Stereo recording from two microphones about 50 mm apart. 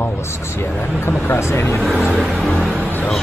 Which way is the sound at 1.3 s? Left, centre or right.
Left.